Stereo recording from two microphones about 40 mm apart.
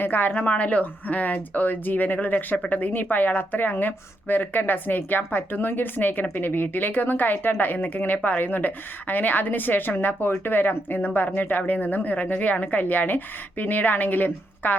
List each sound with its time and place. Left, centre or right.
0.0 s a woman's voice: left
0.3 s a woman's voice: left